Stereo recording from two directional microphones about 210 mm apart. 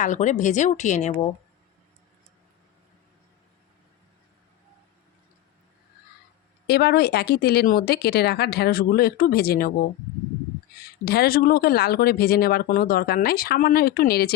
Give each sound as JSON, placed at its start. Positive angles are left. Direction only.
{"t": 0.0, "sound": "speech", "side_deg": 35}
{"t": 6.7, "sound": "speech", "side_deg": 50}
{"t": 11.0, "sound": "speech", "side_deg": 45}